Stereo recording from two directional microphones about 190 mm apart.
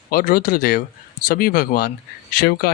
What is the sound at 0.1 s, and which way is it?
Speech, 50° left (ahead or behind).